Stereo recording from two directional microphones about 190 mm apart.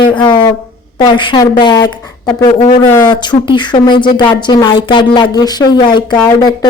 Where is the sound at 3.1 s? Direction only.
25° left (ahead or behind).